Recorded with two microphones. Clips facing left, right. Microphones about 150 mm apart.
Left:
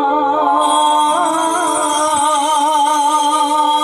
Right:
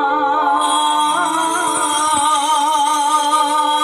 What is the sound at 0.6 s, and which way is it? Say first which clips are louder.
Music: left 4 dB; 40° left (ahead or behind).